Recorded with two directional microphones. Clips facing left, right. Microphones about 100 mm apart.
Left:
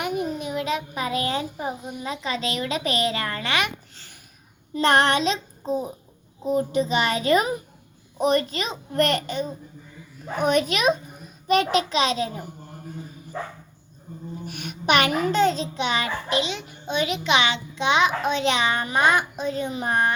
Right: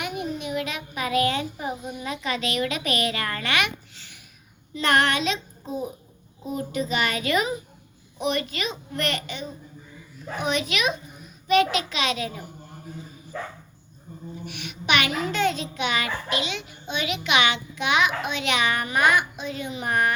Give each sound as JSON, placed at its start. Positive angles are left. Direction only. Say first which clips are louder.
{"t": 0.0, "sound": "a child's voice", "louder": "left 3 dB", "side_deg": 35}
{"t": 3.9, "sound": "a sound", "louder": "even", "side_deg": 40}
{"t": 4.8, "sound": "a child's voice", "louder": "left 3 dB", "side_deg": 30}
{"t": 13.3, "sound": "speech", "louder": "left 1 dB", "side_deg": 25}
{"t": 14.4, "sound": "a child's voice", "louder": "left 5 dB", "side_deg": 40}